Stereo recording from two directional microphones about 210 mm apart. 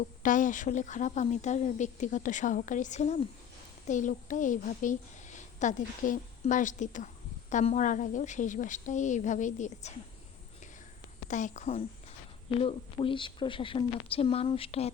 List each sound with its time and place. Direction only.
0.0 s a woman's voice: 40° left (ahead or behind)
11.3 s a woman's voice: 35° left (ahead or behind)